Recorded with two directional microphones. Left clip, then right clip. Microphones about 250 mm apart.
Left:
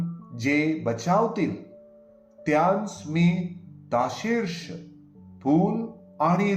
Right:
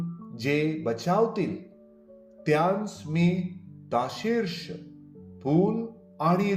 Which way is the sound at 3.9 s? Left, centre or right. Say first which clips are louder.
Left 2 dB; right.